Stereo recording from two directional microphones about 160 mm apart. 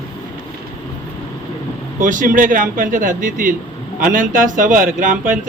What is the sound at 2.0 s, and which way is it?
Speech, 55° right (ahead or behind).